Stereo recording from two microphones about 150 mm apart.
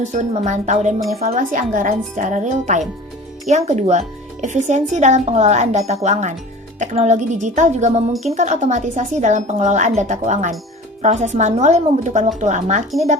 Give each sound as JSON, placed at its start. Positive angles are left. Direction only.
{"t": 0.0, "sound": "speech", "side_deg": -55}
{"t": 8.1, "sound": "speech", "side_deg": 0}
{"t": 8.4, "sound": "speech", "side_deg": -50}